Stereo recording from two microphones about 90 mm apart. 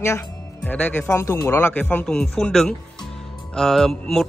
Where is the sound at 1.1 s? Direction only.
30° left (ahead or behind).